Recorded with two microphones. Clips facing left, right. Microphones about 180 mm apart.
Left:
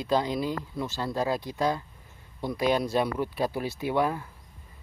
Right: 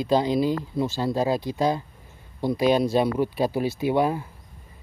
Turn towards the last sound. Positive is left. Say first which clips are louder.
# right 4 dB
turn(degrees=-25)  # may be behind; listen again after turning